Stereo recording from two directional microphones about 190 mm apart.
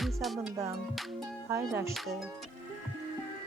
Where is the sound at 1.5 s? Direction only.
15° right (ahead or behind).